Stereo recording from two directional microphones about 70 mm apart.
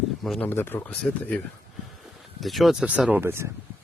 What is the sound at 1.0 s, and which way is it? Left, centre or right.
Speech, centre.